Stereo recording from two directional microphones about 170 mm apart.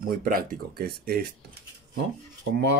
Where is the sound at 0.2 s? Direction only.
55° right (ahead or behind).